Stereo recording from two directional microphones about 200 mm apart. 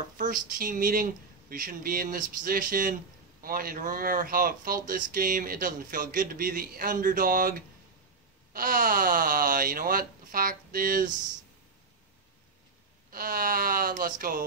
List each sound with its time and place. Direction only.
0.2 s speech: 40° right (ahead or behind)
8.5 s speech: 45° right (ahead or behind)
13.1 s speech: 45° right (ahead or behind)